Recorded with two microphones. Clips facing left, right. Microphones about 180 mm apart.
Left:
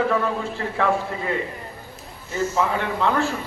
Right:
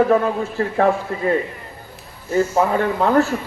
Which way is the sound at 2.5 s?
40° right (ahead or behind).